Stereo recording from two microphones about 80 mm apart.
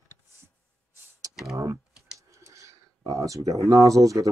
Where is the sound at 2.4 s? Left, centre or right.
Right.